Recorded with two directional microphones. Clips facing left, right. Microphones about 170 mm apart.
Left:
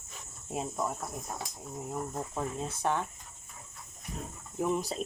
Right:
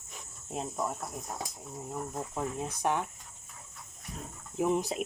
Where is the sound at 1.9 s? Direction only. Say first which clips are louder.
Even; 5° left (ahead or behind).